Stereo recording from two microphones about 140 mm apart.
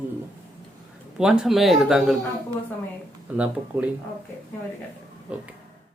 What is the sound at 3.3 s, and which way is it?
Speech, 10° right (ahead or behind).